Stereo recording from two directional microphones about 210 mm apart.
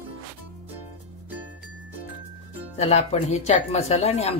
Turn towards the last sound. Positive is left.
turn(degrees=30)  # may be behind; listen again after turning